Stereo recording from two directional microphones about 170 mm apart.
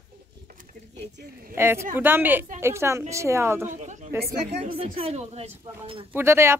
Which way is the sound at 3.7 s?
45° right (ahead or behind).